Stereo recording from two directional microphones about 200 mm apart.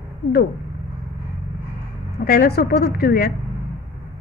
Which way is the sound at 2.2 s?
50° left (ahead or behind).